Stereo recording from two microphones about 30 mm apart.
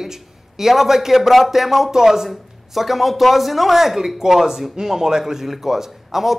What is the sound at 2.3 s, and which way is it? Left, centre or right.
A man's voice, centre.